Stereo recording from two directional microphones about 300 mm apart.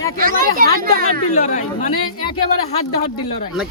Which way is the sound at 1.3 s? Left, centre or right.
Left.